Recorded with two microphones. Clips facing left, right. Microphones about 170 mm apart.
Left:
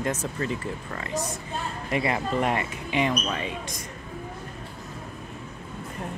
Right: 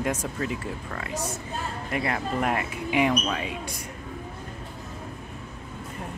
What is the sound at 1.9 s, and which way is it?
Speech, 5° left (ahead or behind).